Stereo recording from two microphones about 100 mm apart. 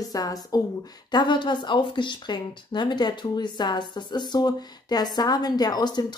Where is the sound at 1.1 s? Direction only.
50° left (ahead or behind).